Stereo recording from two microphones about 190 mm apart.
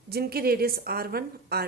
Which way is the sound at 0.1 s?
55° right (ahead or behind).